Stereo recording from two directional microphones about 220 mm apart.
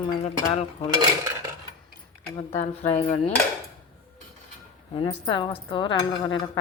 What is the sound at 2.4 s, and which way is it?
Speech, 25° left (ahead or behind).